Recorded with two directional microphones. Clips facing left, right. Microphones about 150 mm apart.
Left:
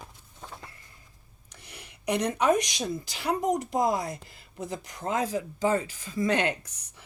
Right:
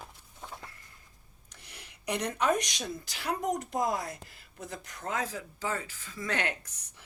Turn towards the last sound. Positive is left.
turn(degrees=15)  # may be behind; listen again after turning